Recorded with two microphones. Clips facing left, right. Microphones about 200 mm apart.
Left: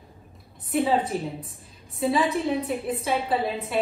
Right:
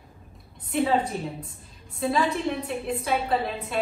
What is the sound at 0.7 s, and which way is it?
A woman's voice, centre (ahead or behind).